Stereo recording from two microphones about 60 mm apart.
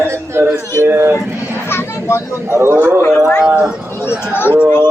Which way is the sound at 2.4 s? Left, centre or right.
Right.